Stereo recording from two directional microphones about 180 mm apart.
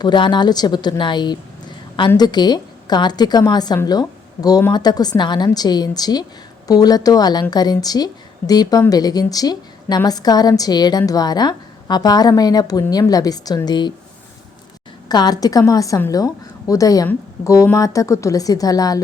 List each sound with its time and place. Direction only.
0.0 s a woman's voice: 25° left (ahead or behind)
15.1 s a woman's voice: 20° left (ahead or behind)